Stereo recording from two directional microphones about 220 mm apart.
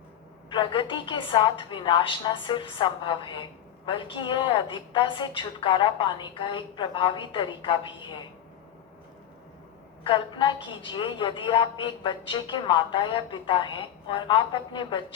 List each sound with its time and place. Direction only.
0.5 s a woman's voice: 20° left (ahead or behind)
10.0 s a woman's voice: 20° left (ahead or behind)